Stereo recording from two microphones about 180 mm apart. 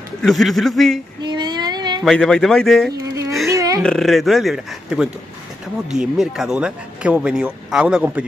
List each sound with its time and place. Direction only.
0.2 s speech: centre (ahead or behind)
1.2 s child singing: 25° right (ahead or behind)
2.0 s speech: 5° left (ahead or behind)
3.0 s babbling: 15° right (ahead or behind)
3.4 s a sound: 20° right (ahead or behind)
3.8 s speech: centre (ahead or behind)